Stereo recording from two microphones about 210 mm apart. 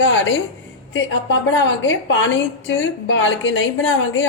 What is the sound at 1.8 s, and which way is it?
A woman's voice, 65° left (ahead or behind).